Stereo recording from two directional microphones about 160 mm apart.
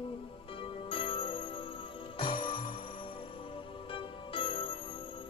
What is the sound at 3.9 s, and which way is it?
Music, 35° left (ahead or behind).